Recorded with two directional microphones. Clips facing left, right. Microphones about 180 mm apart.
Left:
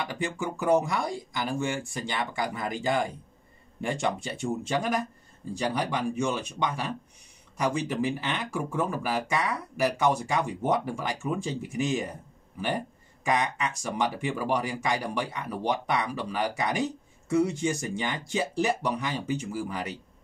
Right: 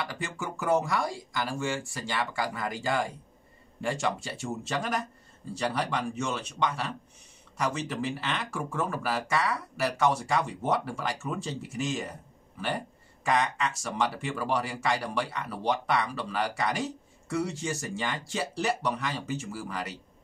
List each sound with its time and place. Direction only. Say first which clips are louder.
0.0 s speech: left 4 dB; 15° left (ahead or behind)
13.2 s speech: even; 15° left (ahead or behind)